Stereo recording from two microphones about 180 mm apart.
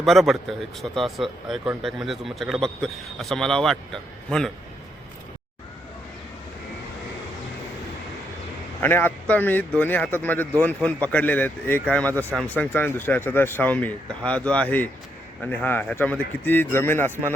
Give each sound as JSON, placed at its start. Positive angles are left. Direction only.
{"t": 0.0, "sound": "speech", "side_deg": 0}
{"t": 8.8, "sound": "speech", "side_deg": 10}